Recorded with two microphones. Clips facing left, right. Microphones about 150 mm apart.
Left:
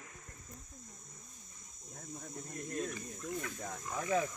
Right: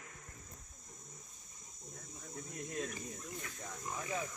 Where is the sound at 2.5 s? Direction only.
Centre (ahead or behind).